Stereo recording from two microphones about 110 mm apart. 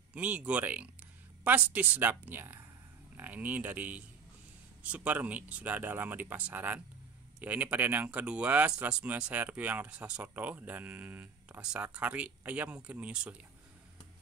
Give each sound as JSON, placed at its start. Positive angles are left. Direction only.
{"t": 0.1, "sound": "speech", "side_deg": -15}